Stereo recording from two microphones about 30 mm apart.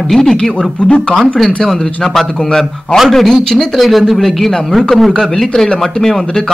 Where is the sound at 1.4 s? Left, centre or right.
Centre.